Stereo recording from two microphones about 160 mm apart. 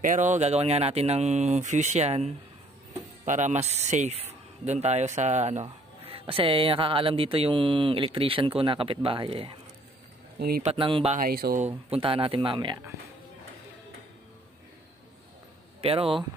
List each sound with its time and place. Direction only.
0.0 s speech: 50° right (ahead or behind); by 9.5 s 35° right (ahead or behind)
10.6 s speech: 35° right (ahead or behind)
11.1 s speech: 70° right (ahead or behind)
11.6 s speech: 35° right (ahead or behind)
15.8 s speech: 35° right (ahead or behind)